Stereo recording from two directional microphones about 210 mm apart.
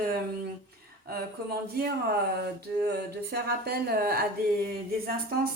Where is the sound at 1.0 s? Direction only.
45° right (ahead or behind).